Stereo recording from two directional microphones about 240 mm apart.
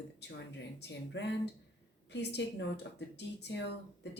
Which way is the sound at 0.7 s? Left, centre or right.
Left.